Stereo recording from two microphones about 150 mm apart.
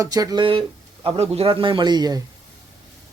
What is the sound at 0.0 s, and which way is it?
A man's voice, 25° right (ahead or behind).